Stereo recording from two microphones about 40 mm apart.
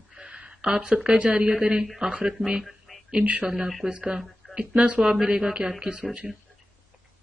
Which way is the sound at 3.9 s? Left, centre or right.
Right.